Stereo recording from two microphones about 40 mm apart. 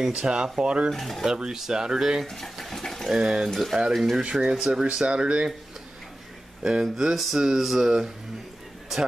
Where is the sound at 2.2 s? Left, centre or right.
Centre.